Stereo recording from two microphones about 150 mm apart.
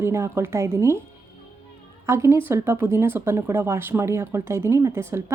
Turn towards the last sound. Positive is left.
turn(degrees=-20)  # may be behind; listen again after turning